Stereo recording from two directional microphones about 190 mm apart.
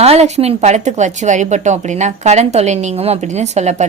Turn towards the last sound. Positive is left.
turn(degrees=-35)  # may be behind; listen again after turning